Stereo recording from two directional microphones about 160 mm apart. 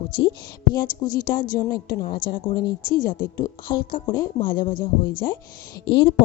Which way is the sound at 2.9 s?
60° left (ahead or behind).